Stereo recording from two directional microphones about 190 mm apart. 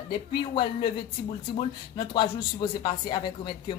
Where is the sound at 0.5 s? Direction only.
25° left (ahead or behind).